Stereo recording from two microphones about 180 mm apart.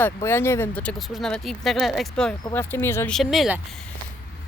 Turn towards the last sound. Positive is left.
turn(degrees=-5)  # may be behind; listen again after turning